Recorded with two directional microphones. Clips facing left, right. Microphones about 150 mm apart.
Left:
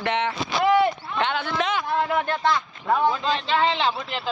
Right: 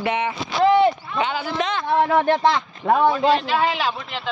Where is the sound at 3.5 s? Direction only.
10° right (ahead or behind).